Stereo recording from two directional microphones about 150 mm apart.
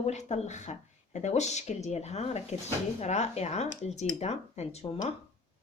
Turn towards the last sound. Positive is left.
turn(degrees=45)  # may be behind; listen again after turning